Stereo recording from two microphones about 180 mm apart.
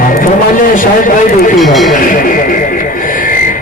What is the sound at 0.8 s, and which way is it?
Speech, 50° left (ahead or behind).